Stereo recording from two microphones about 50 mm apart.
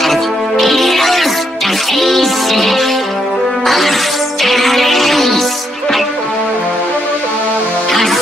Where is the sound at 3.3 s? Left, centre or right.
Centre.